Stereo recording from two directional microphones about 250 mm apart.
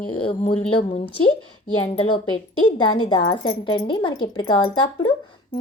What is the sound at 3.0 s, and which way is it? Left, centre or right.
A woman's voice, centre.